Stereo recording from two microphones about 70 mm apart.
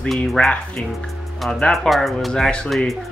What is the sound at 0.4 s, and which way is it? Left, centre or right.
Speech, centre.